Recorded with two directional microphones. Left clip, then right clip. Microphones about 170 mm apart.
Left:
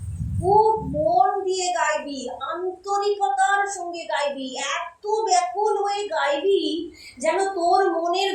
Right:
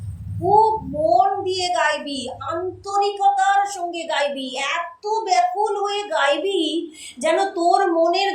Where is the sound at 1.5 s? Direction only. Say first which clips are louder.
Right 3 dB; 40° right (ahead or behind).